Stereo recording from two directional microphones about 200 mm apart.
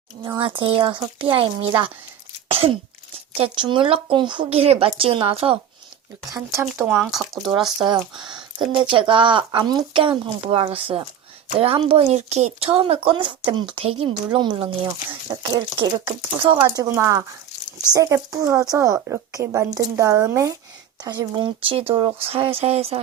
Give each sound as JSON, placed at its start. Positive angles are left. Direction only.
{"t": 0.3, "sound": "speech", "side_deg": -25}
{"t": 2.5, "sound": "sneeze", "side_deg": -30}
{"t": 3.3, "sound": "speech", "side_deg": -25}
{"t": 6.3, "sound": "speech", "side_deg": -10}
{"t": 7.4, "sound": "speech", "side_deg": -20}